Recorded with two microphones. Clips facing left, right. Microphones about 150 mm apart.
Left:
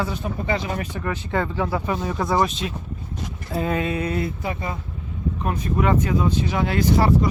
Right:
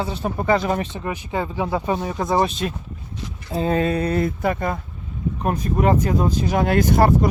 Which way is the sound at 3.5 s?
30° right (ahead or behind).